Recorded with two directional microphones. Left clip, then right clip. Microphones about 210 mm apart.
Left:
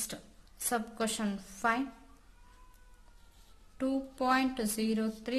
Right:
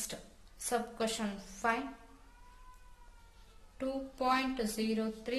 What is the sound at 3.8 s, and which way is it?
A woman's voice, 30° left (ahead or behind).